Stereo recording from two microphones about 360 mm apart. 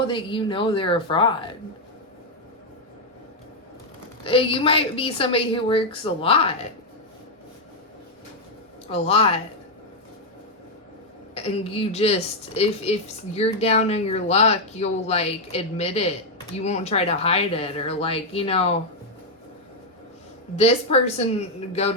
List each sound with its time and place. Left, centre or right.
0.1 s a woman's voice: centre
4.2 s a woman's voice: centre
8.9 s a woman's voice: centre
11.3 s a woman's voice: centre
20.6 s a woman's voice: centre